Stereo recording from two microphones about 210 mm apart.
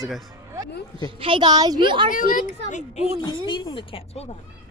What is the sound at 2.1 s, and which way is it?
Speech, 40° left (ahead or behind).